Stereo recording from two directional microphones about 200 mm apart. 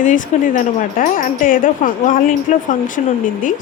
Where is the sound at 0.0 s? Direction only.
40° left (ahead or behind).